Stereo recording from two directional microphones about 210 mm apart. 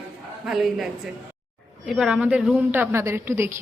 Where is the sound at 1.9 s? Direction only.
5° right (ahead or behind).